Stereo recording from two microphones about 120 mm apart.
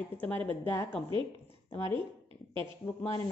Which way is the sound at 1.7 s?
45° right (ahead or behind).